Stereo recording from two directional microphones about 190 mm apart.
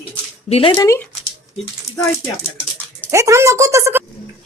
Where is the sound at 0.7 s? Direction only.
15° left (ahead or behind).